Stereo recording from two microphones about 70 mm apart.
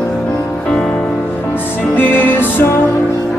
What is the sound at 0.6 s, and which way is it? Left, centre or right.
Music, centre.